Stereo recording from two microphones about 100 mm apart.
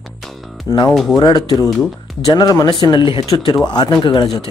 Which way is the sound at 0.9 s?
Centre (ahead or behind).